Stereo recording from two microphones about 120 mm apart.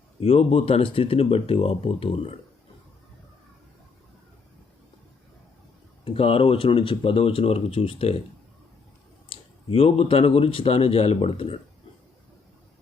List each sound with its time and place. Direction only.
0.2 s speech: 55° left (ahead or behind)
6.1 s speech: 50° left (ahead or behind)
9.3 s speech: 55° left (ahead or behind)